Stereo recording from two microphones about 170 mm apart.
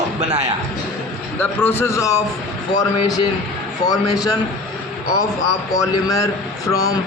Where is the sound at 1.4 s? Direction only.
10° left (ahead or behind).